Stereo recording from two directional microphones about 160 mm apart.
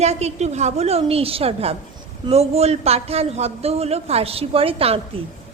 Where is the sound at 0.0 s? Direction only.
45° right (ahead or behind).